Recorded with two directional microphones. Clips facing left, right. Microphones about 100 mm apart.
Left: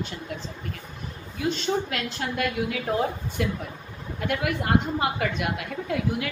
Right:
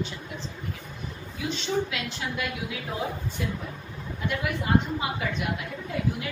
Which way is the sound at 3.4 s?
70° left (ahead or behind).